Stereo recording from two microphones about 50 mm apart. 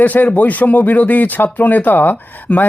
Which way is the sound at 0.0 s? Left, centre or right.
Left.